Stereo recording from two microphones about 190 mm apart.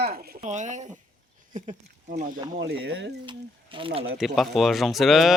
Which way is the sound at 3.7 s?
25° right (ahead or behind).